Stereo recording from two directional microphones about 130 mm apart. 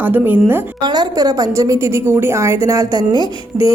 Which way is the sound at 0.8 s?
30° right (ahead or behind).